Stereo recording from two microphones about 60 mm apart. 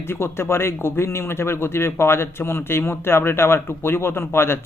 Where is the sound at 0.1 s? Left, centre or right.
Left.